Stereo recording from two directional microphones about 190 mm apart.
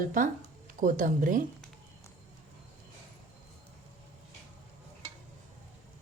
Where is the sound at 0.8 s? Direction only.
45° right (ahead or behind).